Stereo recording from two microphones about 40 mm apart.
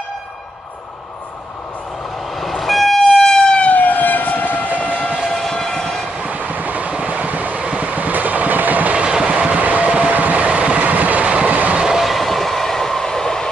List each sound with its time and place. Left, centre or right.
2.3 s train: centre
3.4 s vehicle: left
3.7 s train: left
5.3 s train: centre
6.1 s train: right
8.9 s train: right
9.5 s vehicle: right
10.5 s vehicle: right
10.8 s vehicle: right
11.2 s train: right
11.5 s train: right
12.0 s train: centre